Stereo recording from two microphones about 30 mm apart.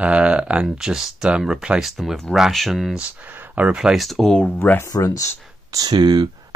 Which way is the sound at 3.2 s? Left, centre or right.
Right.